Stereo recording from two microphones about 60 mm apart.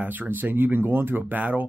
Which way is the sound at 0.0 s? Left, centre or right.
Right.